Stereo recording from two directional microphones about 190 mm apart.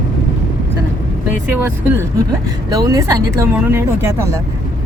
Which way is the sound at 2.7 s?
20° right (ahead or behind).